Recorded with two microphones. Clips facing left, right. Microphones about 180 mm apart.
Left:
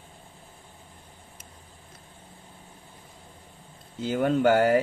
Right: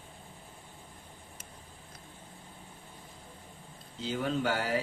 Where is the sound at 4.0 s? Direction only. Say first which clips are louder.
Left 9 dB; 55° left (ahead or behind).